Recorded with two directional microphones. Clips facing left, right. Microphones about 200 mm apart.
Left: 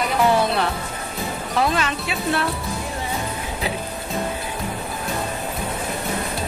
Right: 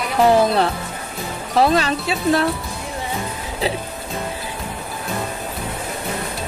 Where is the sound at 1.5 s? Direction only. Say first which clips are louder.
Right 6 dB; 35° right (ahead or behind).